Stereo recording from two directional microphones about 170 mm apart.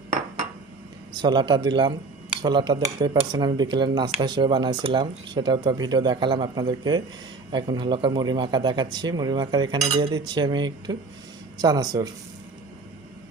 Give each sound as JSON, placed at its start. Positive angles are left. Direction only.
{"t": 1.1, "sound": "speech", "side_deg": -25}